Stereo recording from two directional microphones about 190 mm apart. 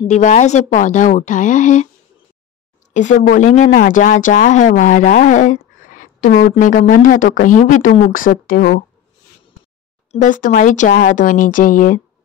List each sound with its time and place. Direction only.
0.1 s a woman's voice: 40° left (ahead or behind)
2.9 s speech: 40° left (ahead or behind)
10.1 s speech: 40° left (ahead or behind)